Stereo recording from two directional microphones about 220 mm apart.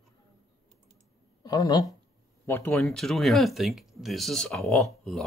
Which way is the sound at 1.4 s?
20° left (ahead or behind).